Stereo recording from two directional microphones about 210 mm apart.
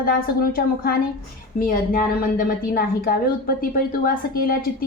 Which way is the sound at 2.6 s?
45° left (ahead or behind).